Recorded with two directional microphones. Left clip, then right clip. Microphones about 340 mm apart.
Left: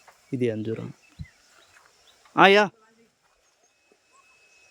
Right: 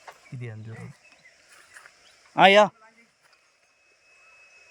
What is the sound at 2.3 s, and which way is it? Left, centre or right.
Speech, centre.